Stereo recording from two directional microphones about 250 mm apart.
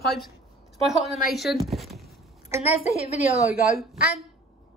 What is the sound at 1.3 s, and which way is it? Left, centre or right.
Speech, centre.